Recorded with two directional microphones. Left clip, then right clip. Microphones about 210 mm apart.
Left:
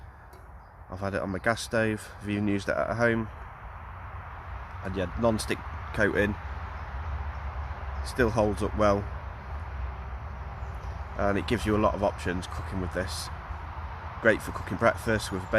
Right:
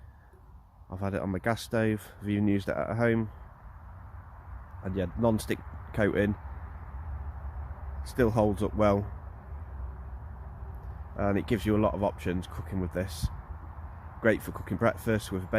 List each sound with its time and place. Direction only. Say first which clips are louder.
0.9 s speech: left 2 dB; 45° right (ahead or behind)
4.8 s speech: left 2 dB; 45° right (ahead or behind)
8.0 s speech: left 1 dB; 45° right (ahead or behind)
11.2 s speech: left 2 dB; 45° right (ahead or behind)